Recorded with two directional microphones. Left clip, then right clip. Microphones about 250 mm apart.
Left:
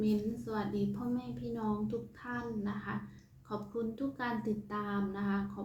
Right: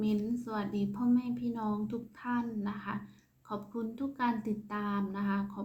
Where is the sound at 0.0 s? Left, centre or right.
Centre.